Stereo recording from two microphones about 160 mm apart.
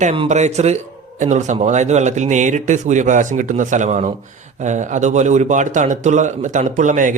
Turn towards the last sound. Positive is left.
turn(degrees=-50)  # may be behind; listen again after turning